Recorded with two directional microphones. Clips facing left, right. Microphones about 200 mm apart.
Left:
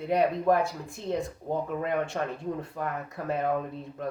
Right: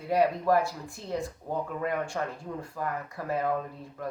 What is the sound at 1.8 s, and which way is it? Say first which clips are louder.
Speech: left 2 dB; 20° left (ahead or behind).